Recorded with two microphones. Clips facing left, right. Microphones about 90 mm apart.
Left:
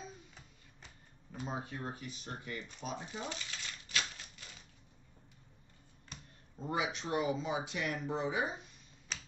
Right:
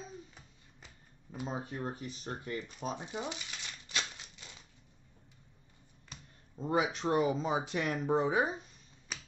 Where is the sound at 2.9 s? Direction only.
20° right (ahead or behind).